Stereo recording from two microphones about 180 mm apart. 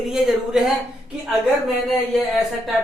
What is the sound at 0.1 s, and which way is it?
Speech, 5° right (ahead or behind).